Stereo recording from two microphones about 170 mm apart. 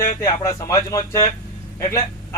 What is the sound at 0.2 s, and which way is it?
A man's voice, 20° left (ahead or behind).